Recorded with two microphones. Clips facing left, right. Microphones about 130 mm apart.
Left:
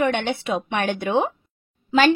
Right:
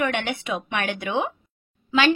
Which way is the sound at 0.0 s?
30° left (ahead or behind).